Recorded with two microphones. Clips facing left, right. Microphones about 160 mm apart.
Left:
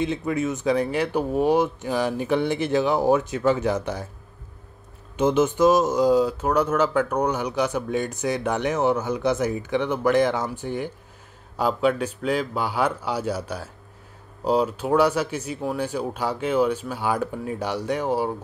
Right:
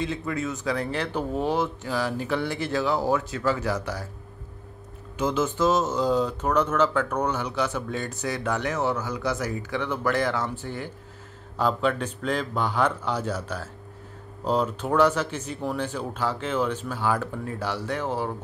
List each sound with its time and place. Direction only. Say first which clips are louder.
0.0 s speech: left 4 dB; 20° left (ahead or behind)
5.1 s speech: left 5 dB; 20° left (ahead or behind)